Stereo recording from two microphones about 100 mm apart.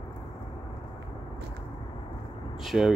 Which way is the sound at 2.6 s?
Centre (ahead or behind).